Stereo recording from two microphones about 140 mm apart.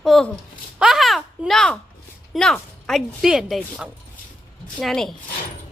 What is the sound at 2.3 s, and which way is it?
Speech, 5° left (ahead or behind).